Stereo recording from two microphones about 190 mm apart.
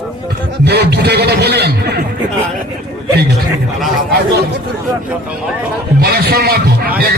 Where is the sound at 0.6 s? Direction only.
60° right (ahead or behind).